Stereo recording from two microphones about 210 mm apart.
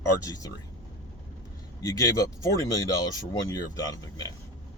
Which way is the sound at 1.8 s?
15° left (ahead or behind).